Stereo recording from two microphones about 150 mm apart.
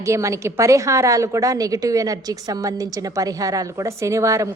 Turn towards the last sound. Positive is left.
turn(degrees=-20)  # may be behind; listen again after turning